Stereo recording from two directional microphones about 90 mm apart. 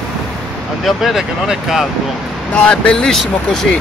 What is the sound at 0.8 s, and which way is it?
Speech, 5° right (ahead or behind).